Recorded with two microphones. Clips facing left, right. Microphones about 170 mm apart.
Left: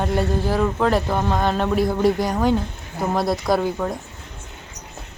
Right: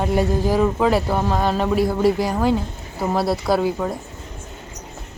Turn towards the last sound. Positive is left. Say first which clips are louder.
# right 1 dB
turn(degrees=-5)  # may be behind; listen again after turning